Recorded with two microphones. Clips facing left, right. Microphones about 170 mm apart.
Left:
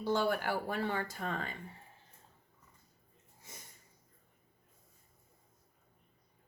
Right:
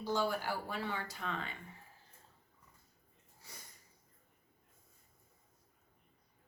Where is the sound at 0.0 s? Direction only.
60° left (ahead or behind); by 1.5 s 45° left (ahead or behind).